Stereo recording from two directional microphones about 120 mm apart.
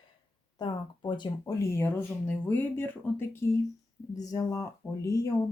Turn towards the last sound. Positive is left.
turn(degrees=30)  # may be behind; listen again after turning